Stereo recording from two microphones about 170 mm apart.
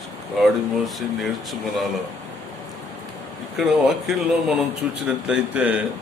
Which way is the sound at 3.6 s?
Centre (ahead or behind).